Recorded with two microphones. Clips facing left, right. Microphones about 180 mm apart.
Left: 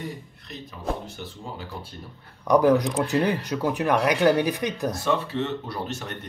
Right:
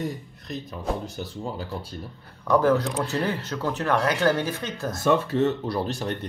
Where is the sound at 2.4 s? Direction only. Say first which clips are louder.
Left 2 dB; 15° left (ahead or behind).